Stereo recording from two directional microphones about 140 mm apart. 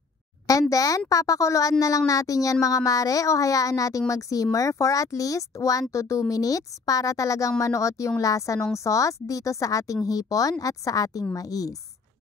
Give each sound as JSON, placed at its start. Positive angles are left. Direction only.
{"t": 0.5, "sound": "a woman's voice", "side_deg": 25}